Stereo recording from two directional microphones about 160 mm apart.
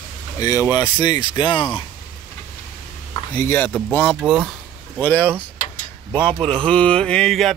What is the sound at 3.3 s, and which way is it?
Speech, 10° left (ahead or behind).